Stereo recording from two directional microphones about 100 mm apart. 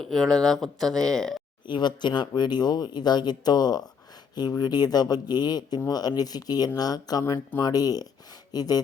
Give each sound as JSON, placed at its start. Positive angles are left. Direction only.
{"t": 0.0, "sound": "speech", "side_deg": 5}
{"t": 1.6, "sound": "speech", "side_deg": 50}